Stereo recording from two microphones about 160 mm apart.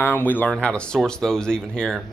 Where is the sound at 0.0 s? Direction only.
10° left (ahead or behind).